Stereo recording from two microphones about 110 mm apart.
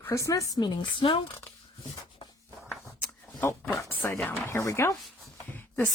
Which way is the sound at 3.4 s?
20° left (ahead or behind).